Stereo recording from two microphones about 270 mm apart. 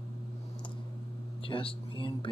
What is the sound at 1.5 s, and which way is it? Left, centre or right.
Speech, centre.